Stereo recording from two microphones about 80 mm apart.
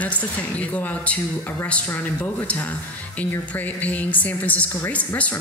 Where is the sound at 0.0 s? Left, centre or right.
Centre.